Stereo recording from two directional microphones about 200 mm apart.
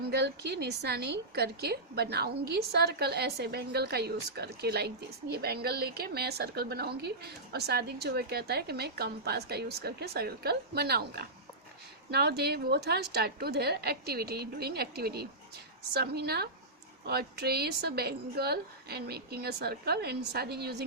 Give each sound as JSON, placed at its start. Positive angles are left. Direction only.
{"t": 0.1, "sound": "a woman's voice", "side_deg": -55}